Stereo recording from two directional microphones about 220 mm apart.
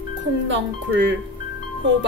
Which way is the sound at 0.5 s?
55° right (ahead or behind).